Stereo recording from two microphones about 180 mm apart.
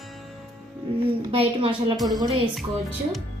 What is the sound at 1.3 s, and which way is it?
Speech, 30° right (ahead or behind).